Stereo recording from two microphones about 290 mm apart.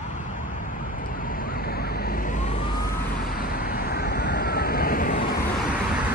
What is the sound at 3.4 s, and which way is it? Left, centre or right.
Vehicle, left.